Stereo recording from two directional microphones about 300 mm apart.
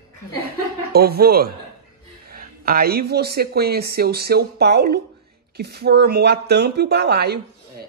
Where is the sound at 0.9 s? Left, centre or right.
Right.